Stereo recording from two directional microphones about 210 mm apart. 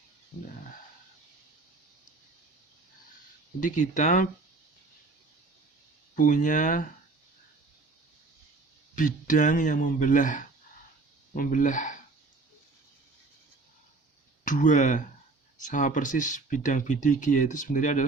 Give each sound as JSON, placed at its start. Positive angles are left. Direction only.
{"t": 3.6, "sound": "speech", "side_deg": 35}
{"t": 6.1, "sound": "speech", "side_deg": 40}
{"t": 9.0, "sound": "speech", "side_deg": 40}
{"t": 14.4, "sound": "speech", "side_deg": 40}